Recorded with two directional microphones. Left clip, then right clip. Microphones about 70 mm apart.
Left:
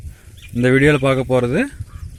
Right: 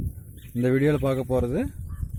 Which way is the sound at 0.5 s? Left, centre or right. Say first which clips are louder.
Left 9 dB; centre.